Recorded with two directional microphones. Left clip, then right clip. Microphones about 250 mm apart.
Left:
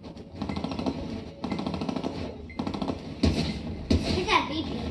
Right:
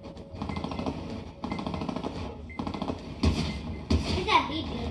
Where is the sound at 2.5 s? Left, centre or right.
Left.